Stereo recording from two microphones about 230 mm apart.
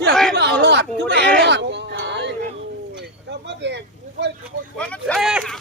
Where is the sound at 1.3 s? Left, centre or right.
Right.